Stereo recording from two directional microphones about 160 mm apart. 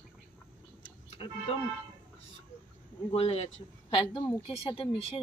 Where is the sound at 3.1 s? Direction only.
40° left (ahead or behind).